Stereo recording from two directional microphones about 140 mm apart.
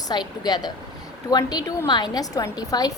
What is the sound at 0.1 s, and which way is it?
A woman's voice, 30° left (ahead or behind).